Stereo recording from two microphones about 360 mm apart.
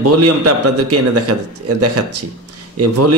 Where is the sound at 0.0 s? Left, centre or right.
Right.